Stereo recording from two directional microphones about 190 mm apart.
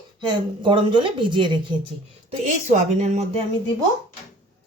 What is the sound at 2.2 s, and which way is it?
A woman's voice, 35° right (ahead or behind).